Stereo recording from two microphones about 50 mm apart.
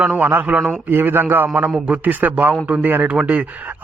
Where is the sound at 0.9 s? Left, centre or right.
Right.